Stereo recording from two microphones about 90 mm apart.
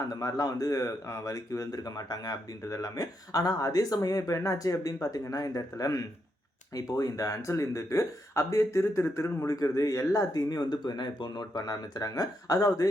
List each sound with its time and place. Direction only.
0.0 s a man's voice: 40° left (ahead or behind)
9.5 s speech: 40° left (ahead or behind)